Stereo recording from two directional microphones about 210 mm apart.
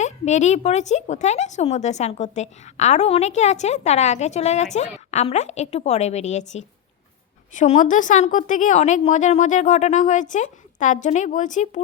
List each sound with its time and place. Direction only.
0.0 s speech: 35° left (ahead or behind)